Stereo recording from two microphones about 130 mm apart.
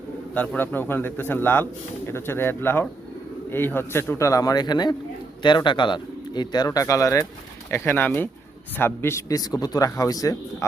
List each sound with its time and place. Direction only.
0.3 s a man's voice: 10° left (ahead or behind)